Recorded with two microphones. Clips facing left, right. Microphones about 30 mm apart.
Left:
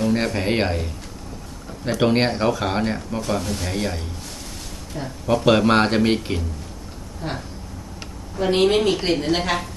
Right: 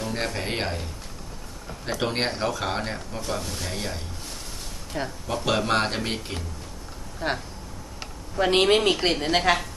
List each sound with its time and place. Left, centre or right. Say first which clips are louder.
0.0 s a sound: left 8 dB; centre
0.3 s speech: left 7 dB; centre
4.9 s speech: right 1 dB; right
5.5 s speech: left 7 dB; centre
7.2 s speech: right 2 dB; right
8.4 s speech: left 2 dB; centre
9.0 s a woman's voice: left 2 dB; centre